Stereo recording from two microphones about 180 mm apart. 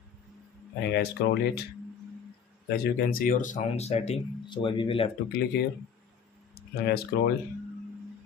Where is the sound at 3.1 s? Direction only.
50° left (ahead or behind); by 5.1 s 30° left (ahead or behind).